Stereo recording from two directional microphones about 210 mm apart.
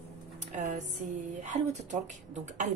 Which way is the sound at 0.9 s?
35° right (ahead or behind).